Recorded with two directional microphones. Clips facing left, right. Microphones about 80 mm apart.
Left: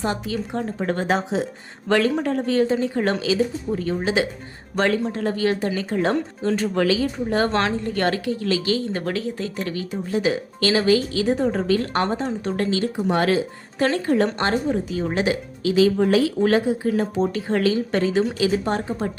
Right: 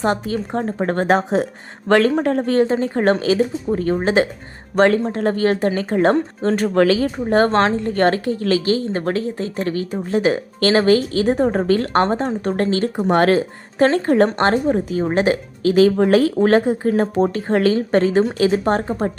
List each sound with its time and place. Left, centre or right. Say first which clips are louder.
0.0 s speech: right 5 dB; right